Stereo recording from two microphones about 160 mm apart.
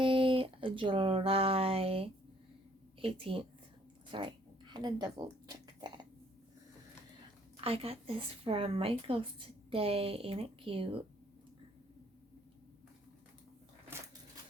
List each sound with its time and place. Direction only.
0.0 s speech: 35° right (ahead or behind)
4.1 s a sound: 30° right (ahead or behind)
7.5 s speech: 35° right (ahead or behind)